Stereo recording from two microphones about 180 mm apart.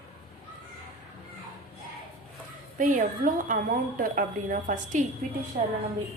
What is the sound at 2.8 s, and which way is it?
A woman's voice, 45° right (ahead or behind).